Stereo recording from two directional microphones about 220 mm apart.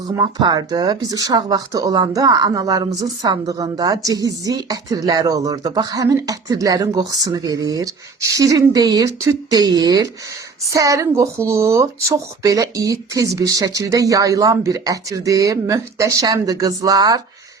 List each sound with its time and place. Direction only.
0.2 s speech: 20° right (ahead or behind)